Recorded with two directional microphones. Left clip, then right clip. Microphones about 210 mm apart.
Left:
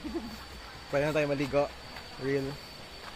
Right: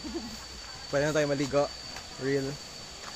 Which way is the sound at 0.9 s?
20° right (ahead or behind).